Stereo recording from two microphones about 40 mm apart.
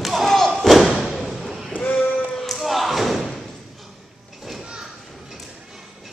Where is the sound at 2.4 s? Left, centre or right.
Centre.